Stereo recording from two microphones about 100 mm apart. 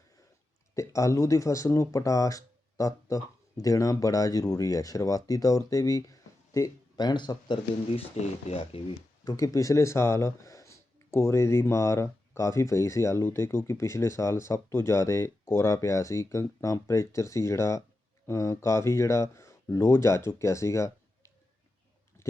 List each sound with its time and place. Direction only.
0.8 s speech: 30° left (ahead or behind); by 7.6 s 50° left (ahead or behind)
7.9 s speech: 80° left
9.2 s speech: 35° left (ahead or behind)
22.2 s a sound: 30° left (ahead or behind)